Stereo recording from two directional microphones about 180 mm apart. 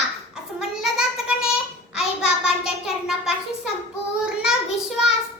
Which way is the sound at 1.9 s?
5° right (ahead or behind).